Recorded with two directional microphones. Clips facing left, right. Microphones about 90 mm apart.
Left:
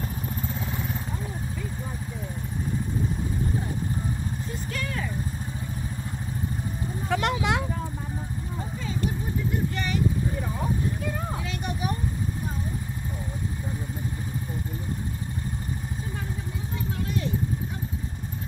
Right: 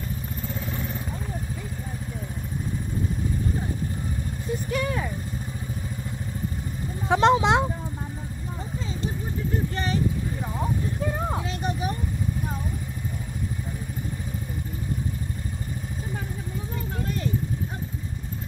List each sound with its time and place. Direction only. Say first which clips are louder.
4.6 s vehicle: right 6 dB; 15° right (ahead or behind)
7.1 s vehicle: right 7 dB; 25° right (ahead or behind)